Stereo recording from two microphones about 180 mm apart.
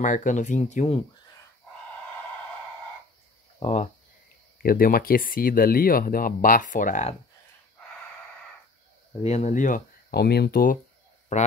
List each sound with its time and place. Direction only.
0.0 s speech: 45° left (ahead or behind)
3.5 s speech: 40° left (ahead or behind)
4.6 s speech: 55° left (ahead or behind)
9.2 s speech: 40° left (ahead or behind)
11.3 s speech: 40° left (ahead or behind)